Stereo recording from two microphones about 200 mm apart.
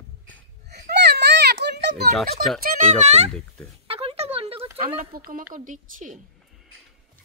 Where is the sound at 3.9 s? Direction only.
30° right (ahead or behind).